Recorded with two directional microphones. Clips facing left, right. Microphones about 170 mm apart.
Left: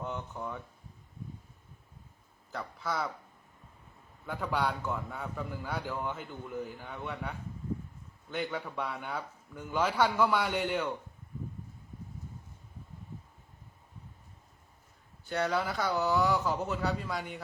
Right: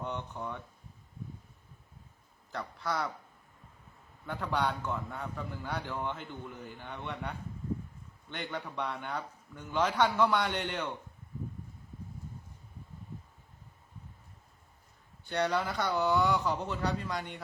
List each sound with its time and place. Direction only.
0.0 s a sound: centre (ahead or behind)
2.5 s a man's voice: centre (ahead or behind)
4.3 s a man's voice: 5° left (ahead or behind)
15.3 s speech: centre (ahead or behind)